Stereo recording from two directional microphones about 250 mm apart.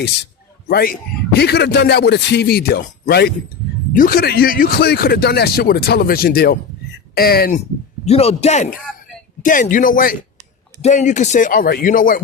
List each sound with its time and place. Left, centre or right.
0.7 s speech: left
8.0 s a man's voice: left